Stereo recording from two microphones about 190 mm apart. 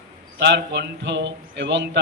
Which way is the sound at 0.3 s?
65° right (ahead or behind).